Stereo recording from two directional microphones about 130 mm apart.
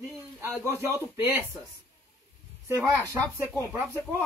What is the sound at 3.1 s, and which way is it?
Speech, 15° right (ahead or behind).